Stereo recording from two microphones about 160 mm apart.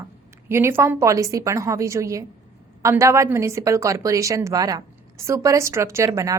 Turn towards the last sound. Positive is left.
turn(degrees=-20)  # may be behind; listen again after turning